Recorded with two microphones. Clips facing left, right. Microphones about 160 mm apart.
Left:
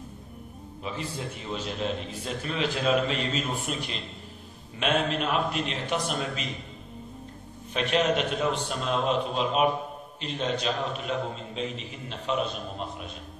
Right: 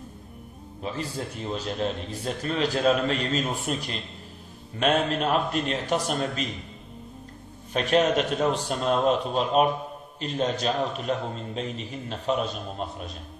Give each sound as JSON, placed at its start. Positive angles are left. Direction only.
{"t": 1.5, "sound": "a man's voice", "side_deg": -40}
{"t": 7.7, "sound": "a man's voice", "side_deg": -40}